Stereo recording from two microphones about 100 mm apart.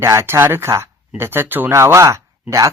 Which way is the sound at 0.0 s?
25° right (ahead or behind).